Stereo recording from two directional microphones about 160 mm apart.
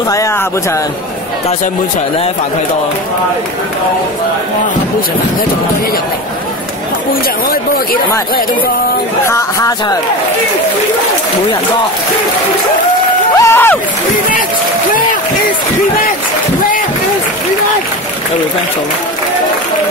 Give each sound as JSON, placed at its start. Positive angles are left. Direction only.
{"t": 9.3, "sound": "speech", "side_deg": 20}
{"t": 13.4, "sound": "speech", "side_deg": 15}